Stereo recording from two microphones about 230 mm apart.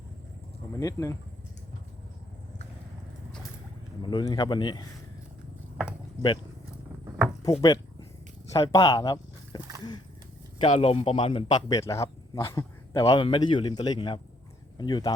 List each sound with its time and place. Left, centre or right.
0.7 s speech: centre
4.0 s a man's voice: centre
7.6 s a sound: centre
8.5 s speech: centre
10.6 s a man's voice: left